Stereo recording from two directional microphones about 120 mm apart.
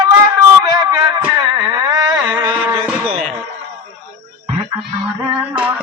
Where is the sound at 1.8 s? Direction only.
30° right (ahead or behind).